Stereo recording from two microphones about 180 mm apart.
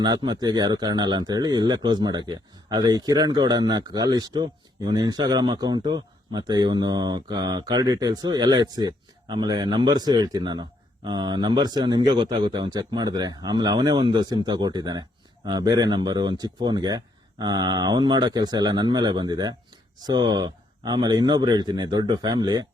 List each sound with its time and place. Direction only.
0.0 s speech: 25° right (ahead or behind)